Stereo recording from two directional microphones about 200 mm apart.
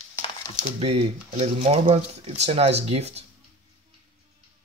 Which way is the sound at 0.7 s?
30° right (ahead or behind).